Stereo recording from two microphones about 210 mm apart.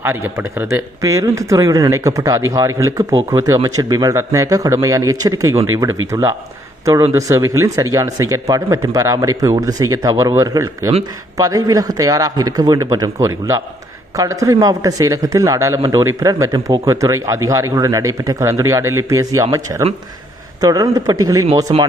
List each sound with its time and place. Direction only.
0.0 s speech: 10° right (ahead or behind)